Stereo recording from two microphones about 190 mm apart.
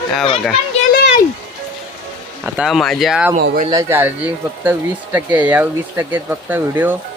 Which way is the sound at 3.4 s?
50° right (ahead or behind).